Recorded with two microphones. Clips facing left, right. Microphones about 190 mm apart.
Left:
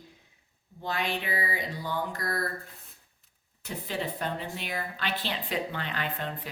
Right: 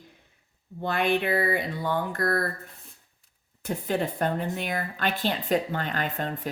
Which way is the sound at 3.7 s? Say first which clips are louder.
Right 6 dB; 50° right (ahead or behind).